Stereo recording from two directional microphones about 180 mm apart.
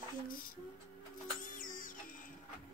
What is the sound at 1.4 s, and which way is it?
Music, 50° left (ahead or behind).